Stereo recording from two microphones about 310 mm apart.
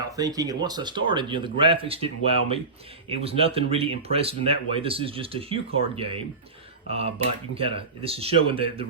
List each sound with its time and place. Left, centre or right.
0.2 s speech: centre